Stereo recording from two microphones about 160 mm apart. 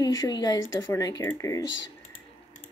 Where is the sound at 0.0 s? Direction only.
25° left (ahead or behind).